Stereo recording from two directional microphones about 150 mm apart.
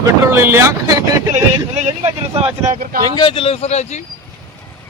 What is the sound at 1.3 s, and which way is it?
Vehicle, 50° right (ahead or behind).